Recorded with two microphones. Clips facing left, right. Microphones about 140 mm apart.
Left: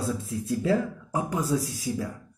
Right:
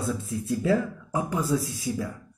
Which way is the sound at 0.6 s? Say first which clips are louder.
Right 1 dB; 30° left (ahead or behind).